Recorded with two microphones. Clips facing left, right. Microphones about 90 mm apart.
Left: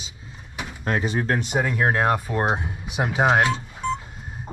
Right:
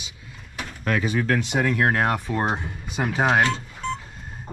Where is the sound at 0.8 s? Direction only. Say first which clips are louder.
Right 1 dB; 25° left (ahead or behind).